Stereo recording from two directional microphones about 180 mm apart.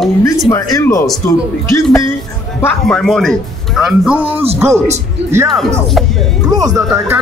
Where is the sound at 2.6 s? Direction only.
10° left (ahead or behind); by 5.4 s 15° right (ahead or behind).